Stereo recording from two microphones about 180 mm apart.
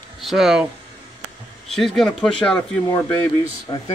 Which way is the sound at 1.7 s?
Centre (ahead or behind).